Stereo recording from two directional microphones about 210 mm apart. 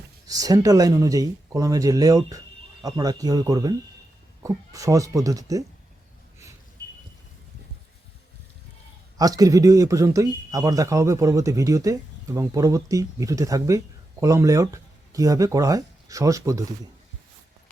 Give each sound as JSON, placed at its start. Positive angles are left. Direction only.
{"t": 0.3, "sound": "speech", "side_deg": -15}
{"t": 9.1, "sound": "speech", "side_deg": -15}